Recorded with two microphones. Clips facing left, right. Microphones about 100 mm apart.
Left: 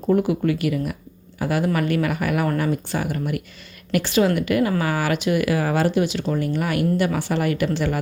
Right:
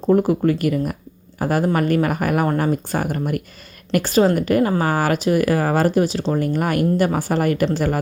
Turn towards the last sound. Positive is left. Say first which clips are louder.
# right 3 dB
turn(degrees=-45)  # may be behind; listen again after turning